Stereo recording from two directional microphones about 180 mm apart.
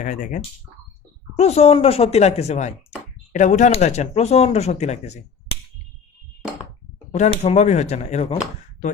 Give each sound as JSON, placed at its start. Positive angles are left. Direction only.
{"t": 0.0, "sound": "speech", "side_deg": 45}
{"t": 7.1, "sound": "speech", "side_deg": 40}